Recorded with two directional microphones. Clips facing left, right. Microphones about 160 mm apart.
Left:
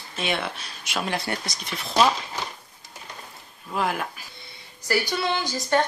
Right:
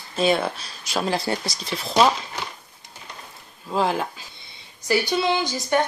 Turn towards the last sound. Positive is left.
turn(degrees=-15)  # may be behind; listen again after turning